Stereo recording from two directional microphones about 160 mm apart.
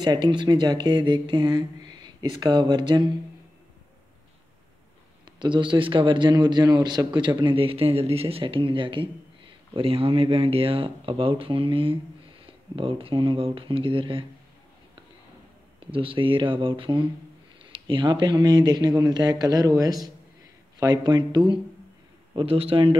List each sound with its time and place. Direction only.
0.0 s speech: 25° right (ahead or behind)
5.4 s speech: 30° right (ahead or behind)
15.8 s speech: 35° right (ahead or behind)